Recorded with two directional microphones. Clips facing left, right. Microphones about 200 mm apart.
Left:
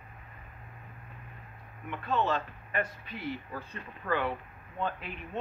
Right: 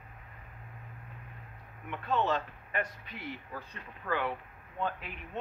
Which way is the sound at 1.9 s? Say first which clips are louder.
Left 1 dB; 20° right (ahead or behind).